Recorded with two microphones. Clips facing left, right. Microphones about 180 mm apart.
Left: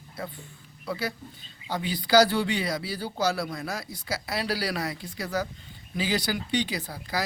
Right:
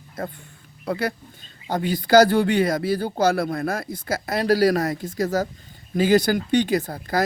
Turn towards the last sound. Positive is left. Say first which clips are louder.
# right 10 dB
turn(degrees=-50)  # may be behind; listen again after turning